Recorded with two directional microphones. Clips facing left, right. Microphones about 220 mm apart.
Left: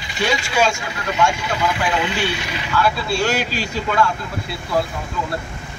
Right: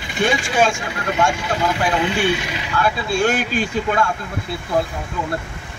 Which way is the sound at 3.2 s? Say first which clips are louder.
Right 5 dB; 50° right (ahead or behind).